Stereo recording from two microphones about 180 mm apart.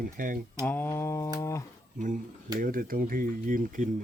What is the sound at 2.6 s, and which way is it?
Speech, 50° right (ahead or behind).